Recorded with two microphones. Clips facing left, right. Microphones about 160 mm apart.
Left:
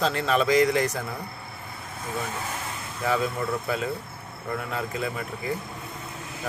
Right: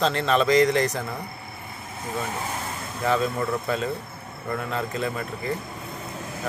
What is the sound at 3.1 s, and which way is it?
A man's voice, 5° left (ahead or behind).